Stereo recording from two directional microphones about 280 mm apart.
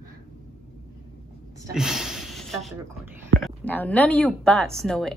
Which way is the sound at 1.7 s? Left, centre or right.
Centre.